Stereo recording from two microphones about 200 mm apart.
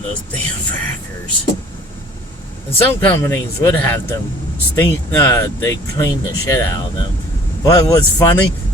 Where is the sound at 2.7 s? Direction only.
10° left (ahead or behind).